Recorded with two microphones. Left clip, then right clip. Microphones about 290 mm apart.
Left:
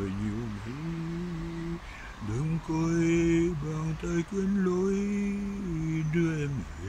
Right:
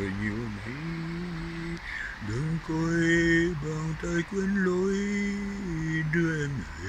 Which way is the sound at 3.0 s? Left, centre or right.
Centre.